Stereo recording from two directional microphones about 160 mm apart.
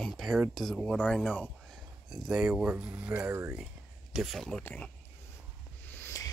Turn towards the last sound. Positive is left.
turn(degrees=20)  # may be behind; listen again after turning